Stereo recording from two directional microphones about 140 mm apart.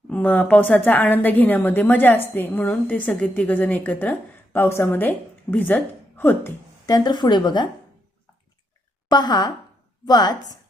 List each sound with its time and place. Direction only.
0.1 s a woman's voice: 10° left (ahead or behind)
6.9 s speech: 30° left (ahead or behind)
9.0 s a woman's voice: 30° left (ahead or behind)